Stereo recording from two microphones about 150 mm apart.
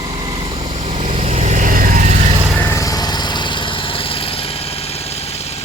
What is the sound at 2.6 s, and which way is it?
Vehicle, 15° left (ahead or behind).